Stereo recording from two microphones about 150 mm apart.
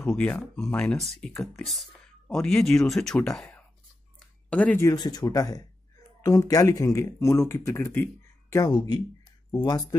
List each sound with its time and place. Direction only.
0.0 s speech: 10° left (ahead or behind)
4.5 s speech: 10° left (ahead or behind)
4.8 s speech: 25° left (ahead or behind)